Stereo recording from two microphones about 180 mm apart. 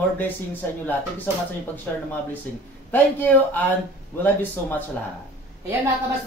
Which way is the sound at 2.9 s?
10° left (ahead or behind).